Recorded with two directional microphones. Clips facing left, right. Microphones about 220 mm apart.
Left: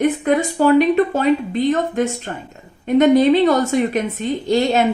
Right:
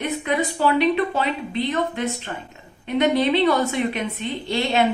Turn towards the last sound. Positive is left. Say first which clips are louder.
# left 6 dB
turn(degrees=45)  # may be behind; listen again after turning